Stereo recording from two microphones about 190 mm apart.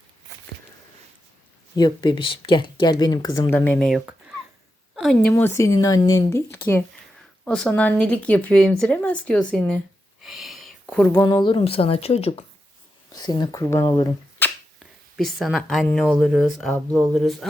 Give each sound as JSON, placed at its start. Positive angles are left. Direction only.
{"t": 1.7, "sound": "speech", "side_deg": 25}
{"t": 5.3, "sound": "speech", "side_deg": 10}
{"t": 10.2, "sound": "a sound", "side_deg": 0}
{"t": 11.1, "sound": "speech", "side_deg": 20}
{"t": 13.1, "sound": "speech", "side_deg": 20}
{"t": 14.4, "sound": "a sound", "side_deg": 10}
{"t": 15.1, "sound": "speech", "side_deg": 0}